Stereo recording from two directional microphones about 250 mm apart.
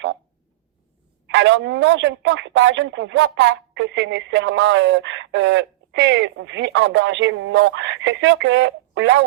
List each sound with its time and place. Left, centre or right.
1.3 s speech: right